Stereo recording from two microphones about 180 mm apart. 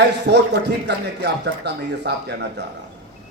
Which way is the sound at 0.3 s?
70° right (ahead or behind).